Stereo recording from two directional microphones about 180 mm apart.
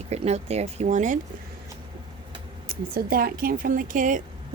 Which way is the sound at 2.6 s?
55° right (ahead or behind).